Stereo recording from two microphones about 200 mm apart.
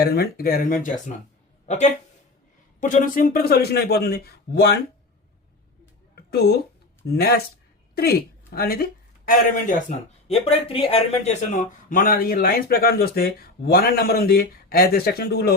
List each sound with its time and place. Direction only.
0.0 s a woman's voice: 50° left (ahead or behind)
6.3 s speech: 55° left (ahead or behind)
10.2 s speech: 30° left (ahead or behind); by 15.5 s 55° left (ahead or behind)